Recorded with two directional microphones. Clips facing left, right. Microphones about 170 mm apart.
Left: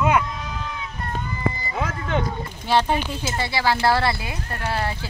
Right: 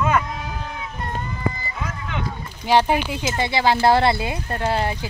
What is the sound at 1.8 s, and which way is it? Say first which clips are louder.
Music: left 4 dB; 50° left (ahead or behind).